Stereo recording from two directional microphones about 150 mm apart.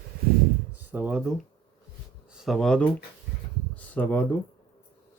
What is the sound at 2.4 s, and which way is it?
Speech, centre (ahead or behind).